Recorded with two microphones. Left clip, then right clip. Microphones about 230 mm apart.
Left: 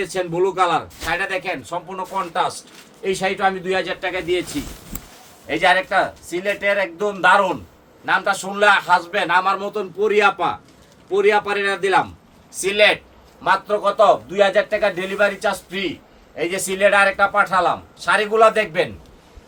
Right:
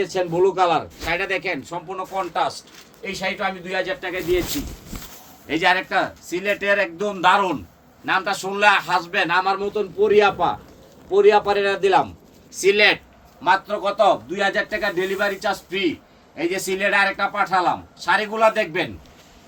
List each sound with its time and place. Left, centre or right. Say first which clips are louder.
0.0 s a man's voice: right 1 dB; left
5.5 s a man's voice: left 3 dB; left
9.5 s a man's voice: left 1 dB; left